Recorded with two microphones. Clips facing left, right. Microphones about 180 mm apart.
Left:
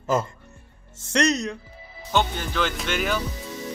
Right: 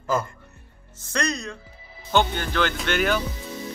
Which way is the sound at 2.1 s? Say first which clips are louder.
Right 2 dB; 5° left (ahead or behind).